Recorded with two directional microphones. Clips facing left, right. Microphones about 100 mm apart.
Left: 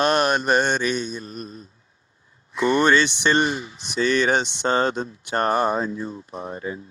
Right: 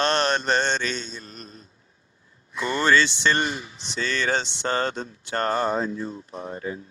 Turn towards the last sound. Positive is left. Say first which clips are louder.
# left 1 dB
turn(degrees=25)  # may be behind; listen again after turning